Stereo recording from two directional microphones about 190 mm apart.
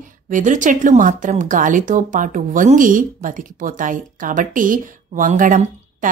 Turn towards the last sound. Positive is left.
turn(degrees=-45)  # may be behind; listen again after turning